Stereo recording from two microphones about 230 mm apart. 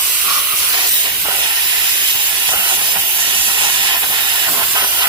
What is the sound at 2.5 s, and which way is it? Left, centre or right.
Steam, centre.